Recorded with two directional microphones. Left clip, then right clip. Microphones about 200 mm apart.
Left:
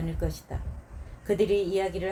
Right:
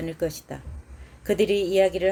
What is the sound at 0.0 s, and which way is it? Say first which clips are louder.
Speech: right 7 dB; 50° right (ahead or behind).